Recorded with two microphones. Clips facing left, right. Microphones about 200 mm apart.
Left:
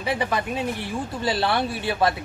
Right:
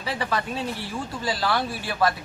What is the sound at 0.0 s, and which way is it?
Speech, 15° left (ahead or behind).